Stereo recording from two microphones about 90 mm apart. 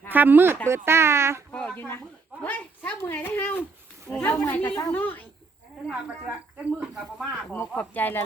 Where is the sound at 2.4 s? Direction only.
20° left (ahead or behind).